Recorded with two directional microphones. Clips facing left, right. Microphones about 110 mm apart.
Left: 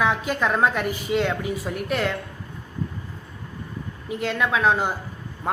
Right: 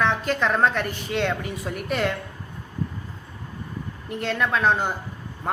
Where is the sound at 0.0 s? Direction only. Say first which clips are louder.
Even; 5° left (ahead or behind).